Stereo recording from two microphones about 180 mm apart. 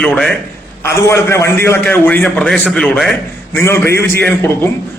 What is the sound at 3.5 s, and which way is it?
A man's voice, 15° left (ahead or behind).